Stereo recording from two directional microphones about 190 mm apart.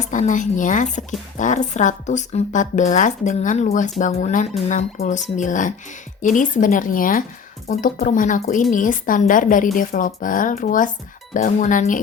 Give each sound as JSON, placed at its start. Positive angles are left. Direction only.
{"t": 0.0, "sound": "a woman's voice", "side_deg": 40}